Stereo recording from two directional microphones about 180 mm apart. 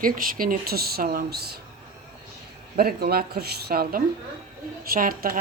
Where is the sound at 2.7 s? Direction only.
60° right (ahead or behind).